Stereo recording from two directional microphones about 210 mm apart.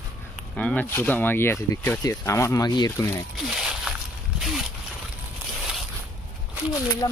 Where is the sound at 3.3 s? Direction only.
Centre (ahead or behind).